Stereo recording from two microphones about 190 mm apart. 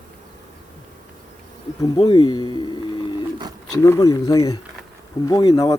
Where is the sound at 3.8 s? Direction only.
20° left (ahead or behind).